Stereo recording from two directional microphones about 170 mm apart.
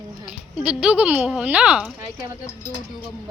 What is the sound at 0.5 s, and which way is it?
A woman's voice, 5° right (ahead or behind).